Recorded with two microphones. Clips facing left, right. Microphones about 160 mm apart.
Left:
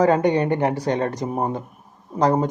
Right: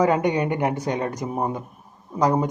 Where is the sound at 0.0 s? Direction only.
35° left (ahead or behind).